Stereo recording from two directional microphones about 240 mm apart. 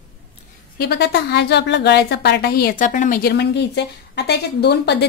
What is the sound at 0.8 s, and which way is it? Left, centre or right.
A woman's voice, left.